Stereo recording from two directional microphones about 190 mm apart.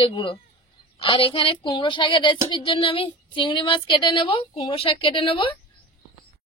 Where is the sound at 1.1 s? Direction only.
30° left (ahead or behind).